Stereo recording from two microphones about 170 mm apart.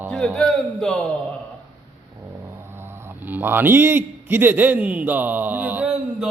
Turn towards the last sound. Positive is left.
turn(degrees=-5)  # may be behind; listen again after turning